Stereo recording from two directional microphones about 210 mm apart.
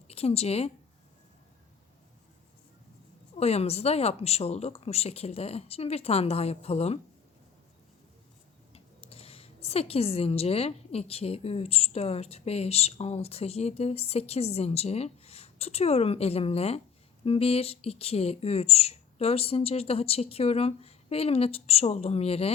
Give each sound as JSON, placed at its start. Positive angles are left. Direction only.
{"t": 0.1, "sound": "speech", "side_deg": 30}
{"t": 3.3, "sound": "speech", "side_deg": 30}
{"t": 8.7, "sound": "speech", "side_deg": 30}